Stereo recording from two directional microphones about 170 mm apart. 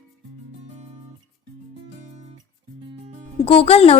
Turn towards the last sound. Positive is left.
turn(degrees=35)  # may be behind; listen again after turning